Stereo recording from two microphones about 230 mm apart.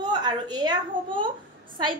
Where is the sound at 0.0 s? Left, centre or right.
Centre.